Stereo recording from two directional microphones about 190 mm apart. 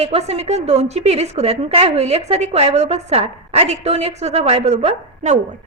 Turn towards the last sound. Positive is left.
turn(degrees=-35)  # may be behind; listen again after turning